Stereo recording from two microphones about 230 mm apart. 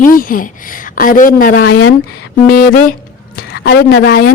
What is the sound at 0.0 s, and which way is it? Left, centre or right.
Speech, left.